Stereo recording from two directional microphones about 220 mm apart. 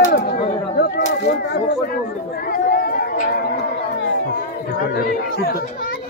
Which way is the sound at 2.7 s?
40° left (ahead or behind).